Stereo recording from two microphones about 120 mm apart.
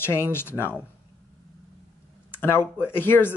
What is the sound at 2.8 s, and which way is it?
Speech, 15° left (ahead or behind).